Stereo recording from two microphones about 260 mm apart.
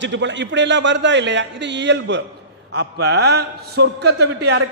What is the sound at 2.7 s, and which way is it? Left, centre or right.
Mantra, right.